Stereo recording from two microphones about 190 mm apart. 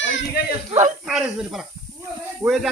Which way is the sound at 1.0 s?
5° right (ahead or behind).